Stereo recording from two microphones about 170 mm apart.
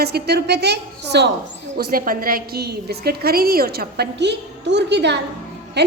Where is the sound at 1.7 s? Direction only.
60° right (ahead or behind); by 5.1 s 90° right.